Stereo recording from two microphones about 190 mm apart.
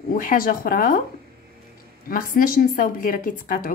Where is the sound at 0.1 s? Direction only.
45° left (ahead or behind).